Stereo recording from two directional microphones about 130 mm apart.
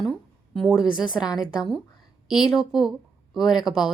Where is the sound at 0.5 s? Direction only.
5° right (ahead or behind).